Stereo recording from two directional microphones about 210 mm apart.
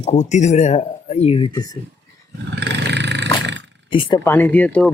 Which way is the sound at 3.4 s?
60° right (ahead or behind).